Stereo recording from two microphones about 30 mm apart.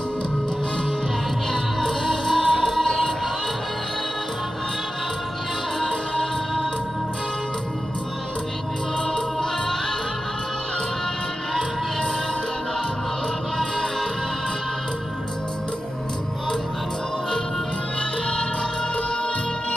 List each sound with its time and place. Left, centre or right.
1.5 s music: centre
5.8 s music: centre
9.1 s music: centre